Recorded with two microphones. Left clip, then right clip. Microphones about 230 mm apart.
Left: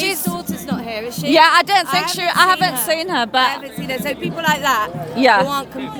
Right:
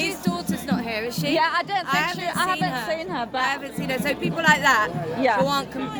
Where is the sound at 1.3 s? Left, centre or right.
Left.